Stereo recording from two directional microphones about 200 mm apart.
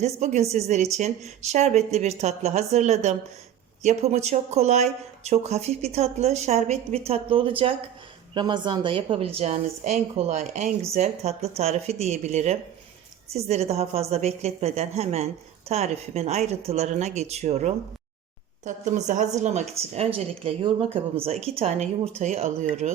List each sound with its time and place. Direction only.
0.0 s a woman's voice: 35° right (ahead or behind)